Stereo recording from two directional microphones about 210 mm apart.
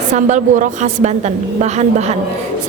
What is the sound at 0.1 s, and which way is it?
A woman's voice, 35° right (ahead or behind).